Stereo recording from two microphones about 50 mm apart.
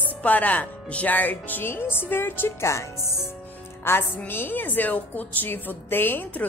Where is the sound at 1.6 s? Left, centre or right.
Left.